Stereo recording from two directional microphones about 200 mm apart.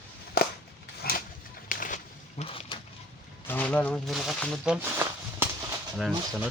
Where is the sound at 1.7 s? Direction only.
40° left (ahead or behind).